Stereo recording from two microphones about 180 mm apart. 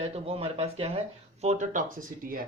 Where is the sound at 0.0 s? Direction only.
35° right (ahead or behind).